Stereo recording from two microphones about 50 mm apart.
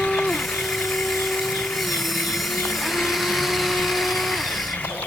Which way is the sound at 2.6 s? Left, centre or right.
Centre.